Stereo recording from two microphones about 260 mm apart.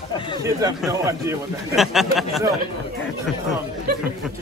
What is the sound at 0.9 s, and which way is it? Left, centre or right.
Speech, centre.